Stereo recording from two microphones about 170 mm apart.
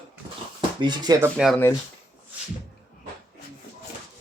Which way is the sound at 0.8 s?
25° right (ahead or behind).